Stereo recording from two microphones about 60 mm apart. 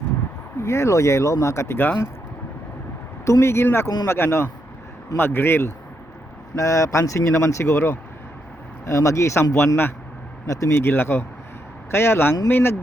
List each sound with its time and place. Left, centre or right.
0.6 s speech: left
3.4 s speech: left
6.6 s speech: left
9.4 s speech: left
10.4 s speech: left
10.8 s speech: left